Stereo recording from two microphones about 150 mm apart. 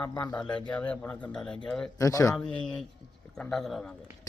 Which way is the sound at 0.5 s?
10° left (ahead or behind).